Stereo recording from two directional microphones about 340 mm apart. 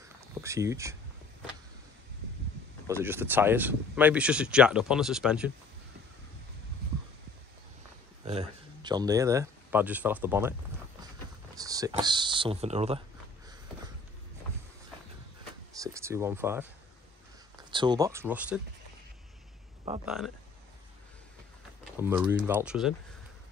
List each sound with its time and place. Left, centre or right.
0.4 s speech: centre
2.9 s speech: centre
8.3 s speech: centre
11.5 s a sound: centre
15.7 s a sound: centre
17.6 s speech: centre
20.1 s speech: centre
21.9 s speech: centre